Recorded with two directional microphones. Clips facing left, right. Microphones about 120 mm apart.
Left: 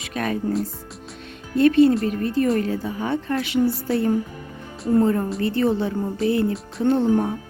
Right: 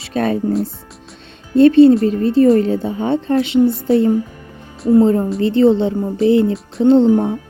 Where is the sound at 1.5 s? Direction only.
25° right (ahead or behind).